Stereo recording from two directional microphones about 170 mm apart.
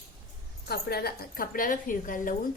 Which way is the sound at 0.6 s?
70° left (ahead or behind).